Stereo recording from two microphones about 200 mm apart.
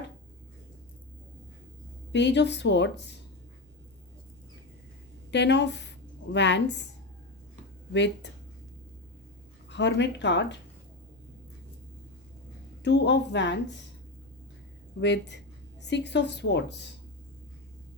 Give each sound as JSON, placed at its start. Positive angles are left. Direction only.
{"t": 2.1, "sound": "a woman's voice", "side_deg": 60}
{"t": 5.3, "sound": "a woman's voice", "side_deg": 60}
{"t": 7.9, "sound": "a woman's voice", "side_deg": 60}
{"t": 9.6, "sound": "speech", "side_deg": 60}
{"t": 12.8, "sound": "a woman's voice", "side_deg": 60}
{"t": 15.0, "sound": "a woman's voice", "side_deg": 60}